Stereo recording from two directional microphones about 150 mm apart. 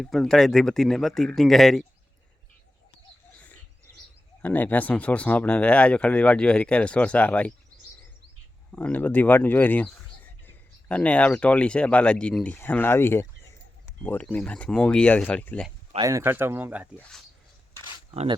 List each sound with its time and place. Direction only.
0.0 s speech: centre (ahead or behind)
4.4 s speech: 10° left (ahead or behind)
8.7 s speech: 10° left (ahead or behind)
16.0 s speech: 20° right (ahead or behind)
17.0 s speech: centre (ahead or behind)
17.7 s a sound: 35° right (ahead or behind)